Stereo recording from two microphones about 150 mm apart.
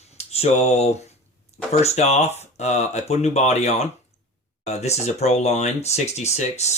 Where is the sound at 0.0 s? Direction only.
45° left (ahead or behind).